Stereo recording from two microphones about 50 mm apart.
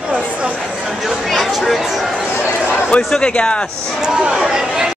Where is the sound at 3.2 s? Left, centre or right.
Left.